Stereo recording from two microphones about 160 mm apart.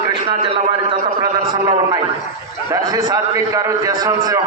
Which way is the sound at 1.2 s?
25° right (ahead or behind).